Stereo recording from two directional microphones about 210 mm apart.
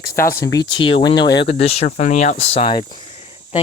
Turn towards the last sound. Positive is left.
turn(degrees=30)  # may be behind; listen again after turning